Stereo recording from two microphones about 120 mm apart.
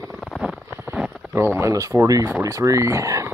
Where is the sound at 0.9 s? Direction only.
10° right (ahead or behind).